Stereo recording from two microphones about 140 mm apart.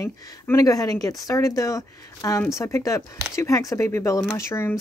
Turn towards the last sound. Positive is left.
turn(degrees=20)  # may be behind; listen again after turning